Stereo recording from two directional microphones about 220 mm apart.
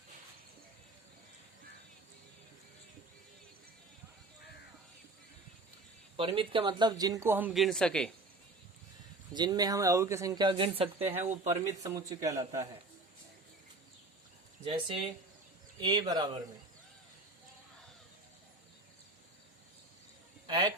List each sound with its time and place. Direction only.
6.1 s speech: 25° right (ahead or behind); by 8.1 s 5° left (ahead or behind)
9.3 s speech: 20° right (ahead or behind)
11.6 s speech: 15° right (ahead or behind)
14.6 s speech: 25° right (ahead or behind)
20.5 s speech: 20° right (ahead or behind)